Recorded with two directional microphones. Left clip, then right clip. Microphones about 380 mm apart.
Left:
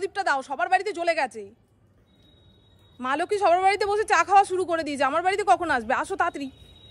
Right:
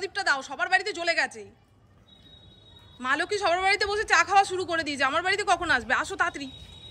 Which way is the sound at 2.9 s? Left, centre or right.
Centre.